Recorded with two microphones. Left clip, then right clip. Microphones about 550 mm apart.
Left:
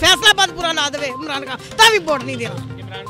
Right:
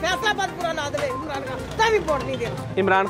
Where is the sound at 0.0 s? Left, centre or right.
Left.